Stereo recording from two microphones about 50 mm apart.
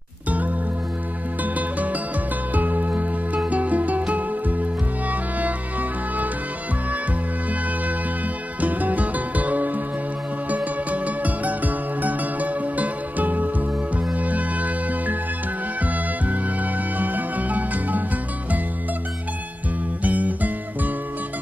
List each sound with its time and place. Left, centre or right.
1.4 s music: right
8.5 s music: right
20.0 s music: right